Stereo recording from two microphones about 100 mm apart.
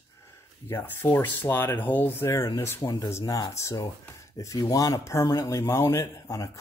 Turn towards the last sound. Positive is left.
turn(degrees=30)  # may be behind; listen again after turning